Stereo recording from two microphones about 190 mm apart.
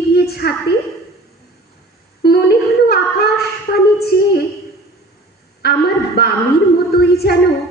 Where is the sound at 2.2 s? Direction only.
55° left (ahead or behind).